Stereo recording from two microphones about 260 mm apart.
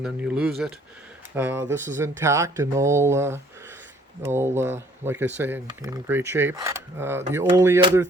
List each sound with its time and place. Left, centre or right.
0.0 s speech: centre